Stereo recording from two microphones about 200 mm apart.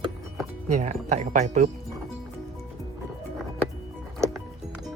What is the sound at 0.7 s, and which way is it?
Speech, 35° right (ahead or behind).